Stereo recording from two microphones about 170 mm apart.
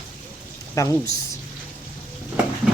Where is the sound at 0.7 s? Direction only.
15° left (ahead or behind).